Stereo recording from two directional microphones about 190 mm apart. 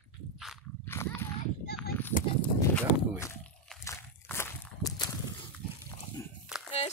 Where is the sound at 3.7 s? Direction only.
5° left (ahead or behind).